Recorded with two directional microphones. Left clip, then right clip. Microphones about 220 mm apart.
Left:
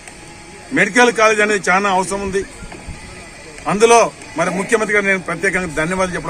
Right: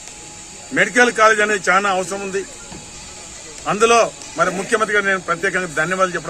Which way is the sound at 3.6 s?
10° right (ahead or behind).